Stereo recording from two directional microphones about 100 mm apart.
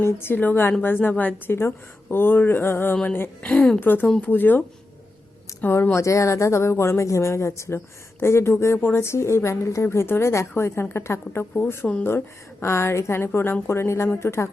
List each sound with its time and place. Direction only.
0.0 s speech: 25° left (ahead or behind)
5.6 s speech: 20° left (ahead or behind)